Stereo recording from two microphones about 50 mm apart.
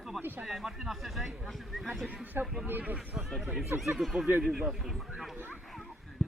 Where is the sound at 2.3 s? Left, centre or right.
Right.